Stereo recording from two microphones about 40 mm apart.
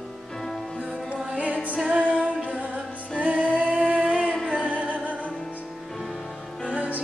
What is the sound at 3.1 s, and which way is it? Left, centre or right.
Female singing, right.